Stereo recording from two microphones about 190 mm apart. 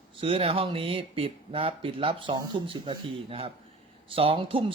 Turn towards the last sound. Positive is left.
turn(degrees=-25)  # may be behind; listen again after turning